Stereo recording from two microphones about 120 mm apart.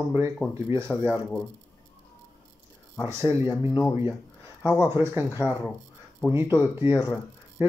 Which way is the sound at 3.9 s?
20° right (ahead or behind).